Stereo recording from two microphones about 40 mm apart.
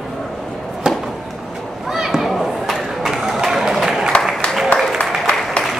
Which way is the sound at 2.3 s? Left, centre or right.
Centre.